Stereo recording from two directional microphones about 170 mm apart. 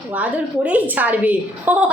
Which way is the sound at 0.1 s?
10° right (ahead or behind).